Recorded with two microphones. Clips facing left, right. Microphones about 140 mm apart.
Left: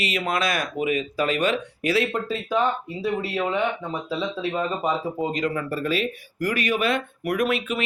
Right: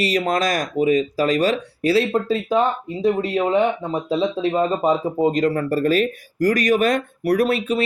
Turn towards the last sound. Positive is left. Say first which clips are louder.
# right 5 dB
turn(degrees=-35)  # may be behind; listen again after turning